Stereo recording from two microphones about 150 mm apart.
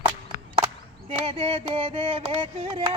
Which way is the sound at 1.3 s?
40° right (ahead or behind).